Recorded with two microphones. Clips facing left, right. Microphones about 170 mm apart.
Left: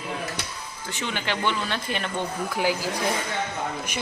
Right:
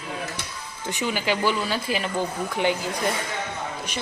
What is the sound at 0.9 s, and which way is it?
Speech, 10° right (ahead or behind).